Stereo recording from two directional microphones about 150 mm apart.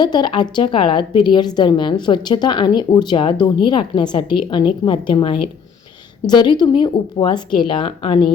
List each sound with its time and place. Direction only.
0.0 s a woman's voice: 30° left (ahead or behind)